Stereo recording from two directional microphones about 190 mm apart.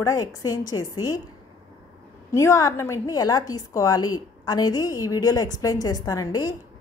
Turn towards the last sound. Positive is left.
turn(degrees=20)  # may be behind; listen again after turning